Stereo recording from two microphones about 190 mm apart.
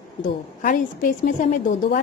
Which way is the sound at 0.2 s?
45° left (ahead or behind).